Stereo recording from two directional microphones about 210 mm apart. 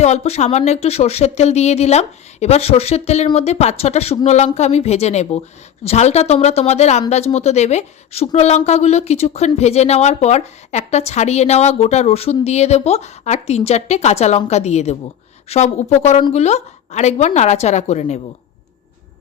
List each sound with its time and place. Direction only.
0.0 s a woman's voice: 30° left (ahead or behind)